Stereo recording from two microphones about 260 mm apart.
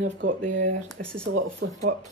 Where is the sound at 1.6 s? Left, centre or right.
Right.